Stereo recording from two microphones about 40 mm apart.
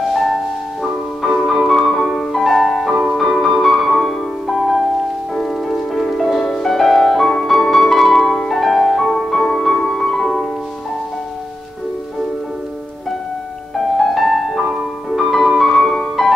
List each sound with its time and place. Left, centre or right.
0.0 s music: centre
1.5 s music: centre
13.9 s music: centre